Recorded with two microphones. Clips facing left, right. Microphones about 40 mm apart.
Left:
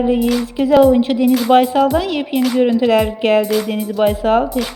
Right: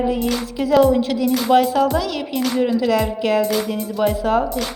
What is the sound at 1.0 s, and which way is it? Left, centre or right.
Speech, left.